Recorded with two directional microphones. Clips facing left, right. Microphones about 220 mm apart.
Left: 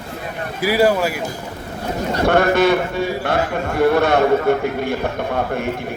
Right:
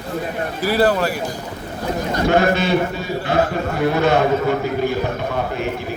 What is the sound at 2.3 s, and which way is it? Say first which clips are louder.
Speech: left 3 dB; 55° left (ahead or behind).